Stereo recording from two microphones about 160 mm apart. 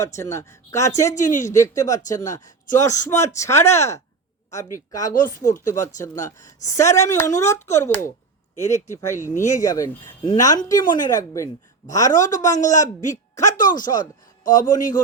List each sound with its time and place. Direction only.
0.0 s speech: 20° left (ahead or behind)
1.1 s speech: 50° left (ahead or behind)
1.5 s speech: 20° left (ahead or behind)
12.1 s a man's voice: 50° left (ahead or behind)